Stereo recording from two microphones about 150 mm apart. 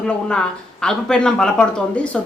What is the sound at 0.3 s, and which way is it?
Speech, 5° left (ahead or behind).